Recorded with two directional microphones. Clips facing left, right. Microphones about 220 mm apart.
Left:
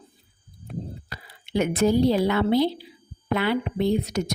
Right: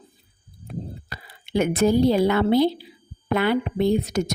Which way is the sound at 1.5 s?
50° right (ahead or behind).